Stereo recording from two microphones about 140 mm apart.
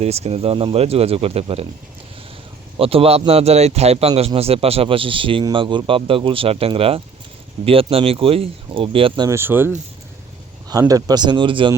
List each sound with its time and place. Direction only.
0.0 s speech: 50° right (ahead or behind)
2.7 s speech: 40° right (ahead or behind)
9.3 s speech: 15° right (ahead or behind)
10.7 s speech: 25° right (ahead or behind)